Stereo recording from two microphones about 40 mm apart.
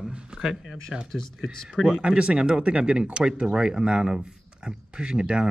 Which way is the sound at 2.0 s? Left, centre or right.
Right.